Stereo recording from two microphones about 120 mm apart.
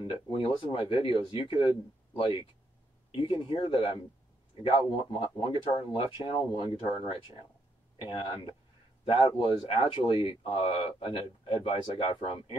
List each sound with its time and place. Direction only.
0.0 s speech: 45° left (ahead or behind)